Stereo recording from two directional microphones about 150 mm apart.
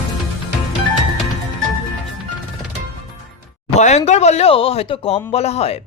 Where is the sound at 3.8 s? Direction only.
50° left (ahead or behind).